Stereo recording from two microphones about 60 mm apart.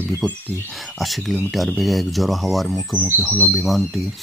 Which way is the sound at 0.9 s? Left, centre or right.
Centre.